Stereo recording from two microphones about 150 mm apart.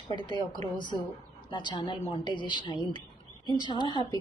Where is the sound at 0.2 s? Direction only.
30° left (ahead or behind).